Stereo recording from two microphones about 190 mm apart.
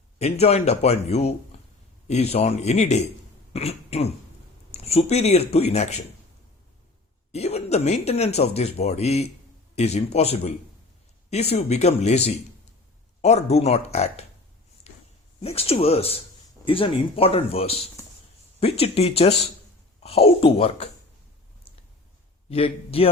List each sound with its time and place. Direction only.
0.2 s speech: 35° left (ahead or behind)
3.5 s throat clearing: 30° left (ahead or behind)
4.7 s speech: 35° left (ahead or behind)
7.3 s speech: 35° left (ahead or behind)
11.3 s speech: 35° left (ahead or behind)
14.9 s a sound: 35° left (ahead or behind)
15.4 s speech: 30° left (ahead or behind)
22.4 s speech: 30° left (ahead or behind)